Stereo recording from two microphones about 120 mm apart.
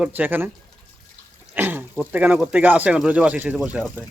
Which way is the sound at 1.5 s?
15° right (ahead or behind).